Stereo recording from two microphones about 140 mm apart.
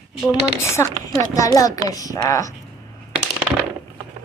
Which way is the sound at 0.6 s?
20° left (ahead or behind).